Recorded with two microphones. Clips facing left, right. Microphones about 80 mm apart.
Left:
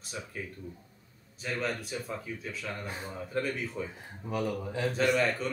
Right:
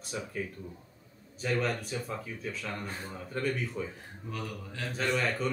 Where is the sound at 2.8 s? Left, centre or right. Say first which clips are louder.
Left 1 dB; centre.